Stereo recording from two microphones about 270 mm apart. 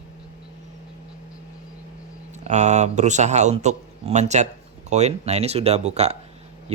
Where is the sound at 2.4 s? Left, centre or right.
Right.